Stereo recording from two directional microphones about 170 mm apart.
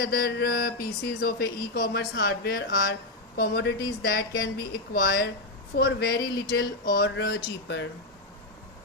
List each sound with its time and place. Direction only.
0.0 s speech: 65° left (ahead or behind); by 7.9 s 90° left